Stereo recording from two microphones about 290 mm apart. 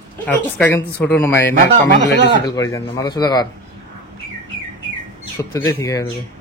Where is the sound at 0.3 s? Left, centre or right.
Centre.